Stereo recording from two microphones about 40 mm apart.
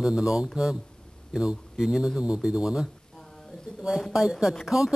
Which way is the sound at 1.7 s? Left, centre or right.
Centre.